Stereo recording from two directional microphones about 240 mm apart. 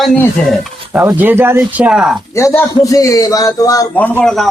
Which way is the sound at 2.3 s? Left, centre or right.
Centre.